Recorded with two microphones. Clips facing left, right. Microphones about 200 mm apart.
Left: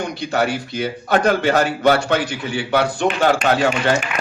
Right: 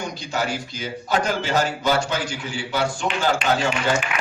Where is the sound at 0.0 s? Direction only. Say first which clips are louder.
Left 6 dB; 60° left (ahead or behind).